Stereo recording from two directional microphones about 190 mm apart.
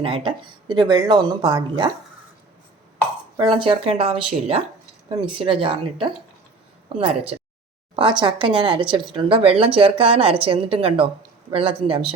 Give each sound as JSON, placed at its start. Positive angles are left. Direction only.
{"t": 0.0, "sound": "speech", "side_deg": -25}
{"t": 3.3, "sound": "speech", "side_deg": -25}